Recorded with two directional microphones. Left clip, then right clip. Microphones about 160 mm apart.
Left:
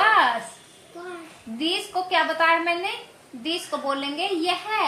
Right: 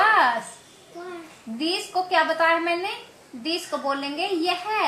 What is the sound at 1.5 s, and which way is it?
A woman's voice, 15° right (ahead or behind).